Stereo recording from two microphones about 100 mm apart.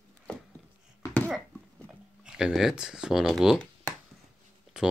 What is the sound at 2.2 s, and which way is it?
Speech, 5° right (ahead or behind).